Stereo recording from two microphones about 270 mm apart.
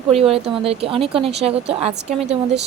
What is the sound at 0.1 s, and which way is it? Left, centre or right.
Speech, right.